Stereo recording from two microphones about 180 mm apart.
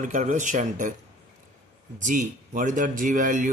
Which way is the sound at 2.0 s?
45° right (ahead or behind).